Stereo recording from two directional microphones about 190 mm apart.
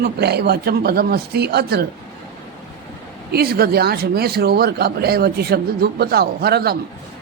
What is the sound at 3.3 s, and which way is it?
Speech, 55° right (ahead or behind).